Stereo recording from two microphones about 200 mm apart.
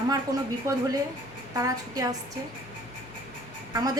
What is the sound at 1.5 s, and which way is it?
Speech, 20° right (ahead or behind).